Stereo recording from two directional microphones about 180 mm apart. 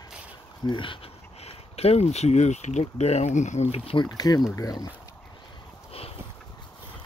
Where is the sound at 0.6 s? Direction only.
25° left (ahead or behind).